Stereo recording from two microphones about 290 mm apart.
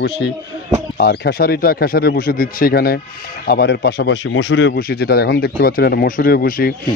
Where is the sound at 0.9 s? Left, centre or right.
Left.